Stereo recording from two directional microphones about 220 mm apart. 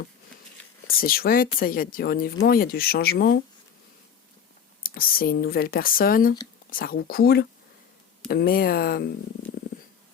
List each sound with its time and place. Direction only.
0.9 s speech: 40° left (ahead or behind)
4.8 s speech: 40° left (ahead or behind)